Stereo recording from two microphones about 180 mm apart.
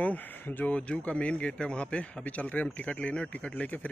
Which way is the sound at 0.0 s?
10° left (ahead or behind).